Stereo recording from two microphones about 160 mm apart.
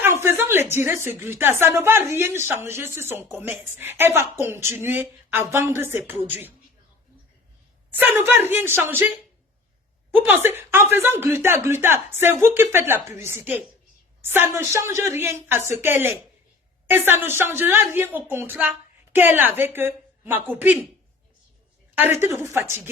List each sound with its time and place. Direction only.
0.0 s a woman's voice: 15° right (ahead or behind)
7.9 s a woman's voice: 10° right (ahead or behind)
22.2 s a woman's voice: 15° right (ahead or behind)